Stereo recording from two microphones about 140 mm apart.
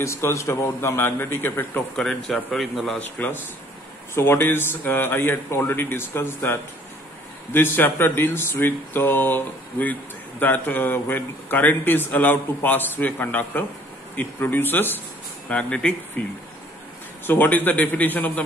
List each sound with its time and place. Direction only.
0.0 s speech: 20° left (ahead or behind); by 3.0 s centre (ahead or behind)
3.0 s speech: 10° left (ahead or behind)
17.3 s speech: 15° left (ahead or behind)